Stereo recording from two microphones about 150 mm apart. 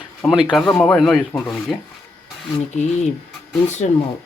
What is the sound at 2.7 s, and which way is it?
Speech, 50° left (ahead or behind).